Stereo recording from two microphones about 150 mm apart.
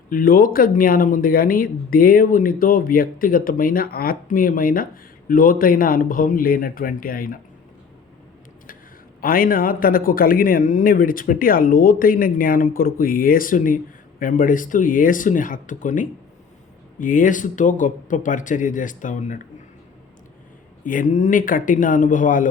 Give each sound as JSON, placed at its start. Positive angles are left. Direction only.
{"t": 0.1, "sound": "speech", "side_deg": 70}
{"t": 9.2, "sound": "speech", "side_deg": 70}
{"t": 20.8, "sound": "speech", "side_deg": 65}